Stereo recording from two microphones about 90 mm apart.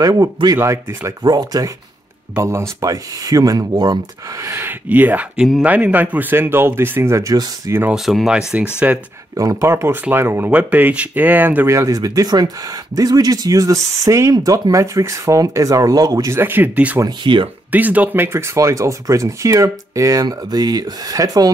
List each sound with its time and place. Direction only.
0.0 s speech: 35° right (ahead or behind)
1.2 s speech: 45° right (ahead or behind)
2.3 s speech: 30° right (ahead or behind); by 4.0 s 45° right (ahead or behind)
4.4 s speech: 30° right (ahead or behind)
5.4 s speech: 5° right (ahead or behind)
5.7 s speech: 15° right (ahead or behind); by 7.3 s 35° right (ahead or behind)
7.9 s speech: centre (ahead or behind)
9.4 s speech: 35° right (ahead or behind); by 11.7 s 20° right (ahead or behind)
11.7 s speech: 40° right (ahead or behind)
16.3 s speech: 20° right (ahead or behind)
17.2 s speech: 65° right (ahead or behind)
17.6 s speech: 20° right (ahead or behind); by 21.5 s 45° right (ahead or behind)